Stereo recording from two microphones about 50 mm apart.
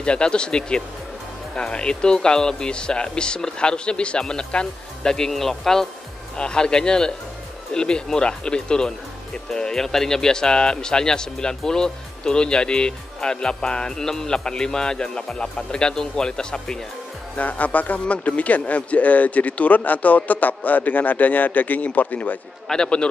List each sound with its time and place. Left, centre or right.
0.0 s speech: left
6.3 s speech: centre
17.4 s speech: left
22.7 s speech: centre